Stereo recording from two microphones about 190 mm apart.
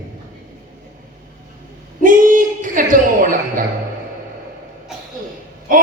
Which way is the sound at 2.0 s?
45° right (ahead or behind).